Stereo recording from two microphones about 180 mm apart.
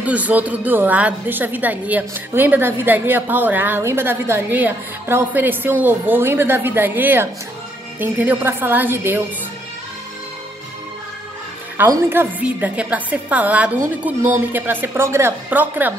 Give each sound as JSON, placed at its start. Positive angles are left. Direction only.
{"t": 0.0, "sound": "a woman's voice", "side_deg": -10}
{"t": 11.7, "sound": "a woman's voice", "side_deg": -15}